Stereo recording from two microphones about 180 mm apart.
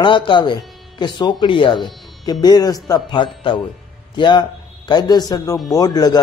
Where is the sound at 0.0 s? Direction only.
25° left (ahead or behind).